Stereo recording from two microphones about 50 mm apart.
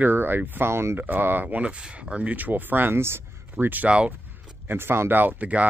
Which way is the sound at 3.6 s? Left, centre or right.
Right.